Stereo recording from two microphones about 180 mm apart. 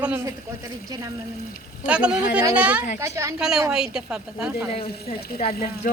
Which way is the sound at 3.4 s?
5° right (ahead or behind).